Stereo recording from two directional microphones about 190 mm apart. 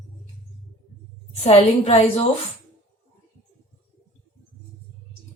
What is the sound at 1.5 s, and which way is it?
Speech, 30° left (ahead or behind).